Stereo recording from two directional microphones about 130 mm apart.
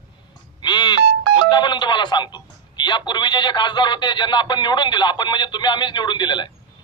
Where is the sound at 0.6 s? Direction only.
35° left (ahead or behind).